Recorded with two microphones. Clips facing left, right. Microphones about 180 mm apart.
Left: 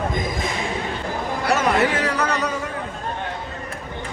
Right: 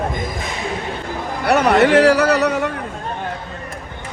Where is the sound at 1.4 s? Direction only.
65° right (ahead or behind).